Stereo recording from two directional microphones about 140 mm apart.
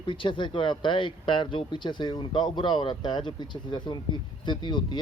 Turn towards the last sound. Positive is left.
turn(degrees=35)  # may be behind; listen again after turning